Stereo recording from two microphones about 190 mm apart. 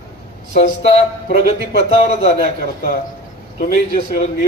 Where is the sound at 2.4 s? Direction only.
50° left (ahead or behind).